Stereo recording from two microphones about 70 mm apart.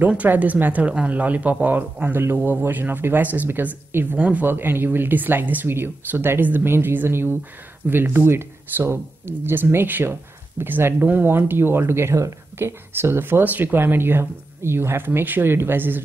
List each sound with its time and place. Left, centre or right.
0.0 s speech: right